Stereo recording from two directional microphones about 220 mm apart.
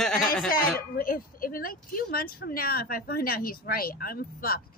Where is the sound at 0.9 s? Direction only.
40° left (ahead or behind).